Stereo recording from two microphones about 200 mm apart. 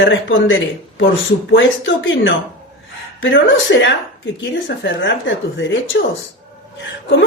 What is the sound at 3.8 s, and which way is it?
Speech, 65° left (ahead or behind).